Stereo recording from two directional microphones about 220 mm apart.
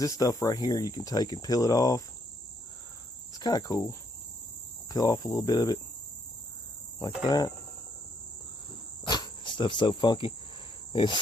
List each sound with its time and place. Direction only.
0.0 s speech: 15° left (ahead or behind)
3.3 s cricket: 15° left (ahead or behind)
4.9 s speech: 15° left (ahead or behind)
7.3 s speech: 15° left (ahead or behind)
9.0 s speech: 20° left (ahead or behind)
10.9 s cricket: 20° left (ahead or behind)